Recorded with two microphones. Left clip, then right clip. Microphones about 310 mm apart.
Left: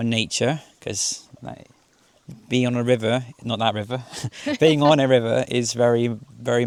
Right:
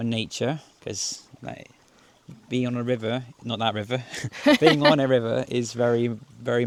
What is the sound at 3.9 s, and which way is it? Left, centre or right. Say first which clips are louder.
Speech: right 1 dB; centre.